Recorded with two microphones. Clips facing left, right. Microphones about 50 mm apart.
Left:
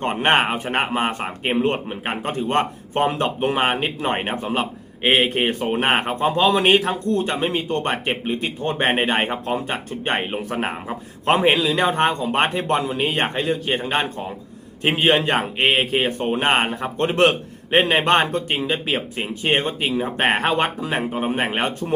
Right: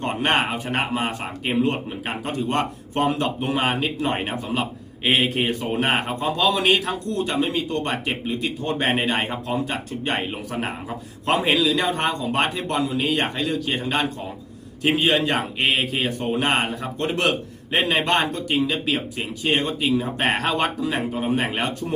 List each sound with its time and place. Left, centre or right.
0.0 s a man's voice: left